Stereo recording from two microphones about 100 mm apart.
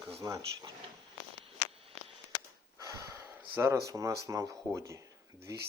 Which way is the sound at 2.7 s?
30° right (ahead or behind).